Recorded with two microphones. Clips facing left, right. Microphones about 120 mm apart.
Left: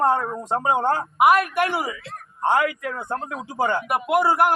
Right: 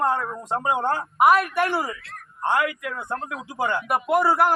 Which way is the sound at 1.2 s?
10° left (ahead or behind).